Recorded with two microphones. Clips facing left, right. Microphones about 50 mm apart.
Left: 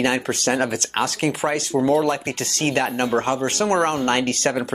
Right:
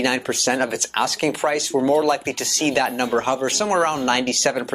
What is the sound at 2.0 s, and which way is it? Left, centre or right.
Speech, left.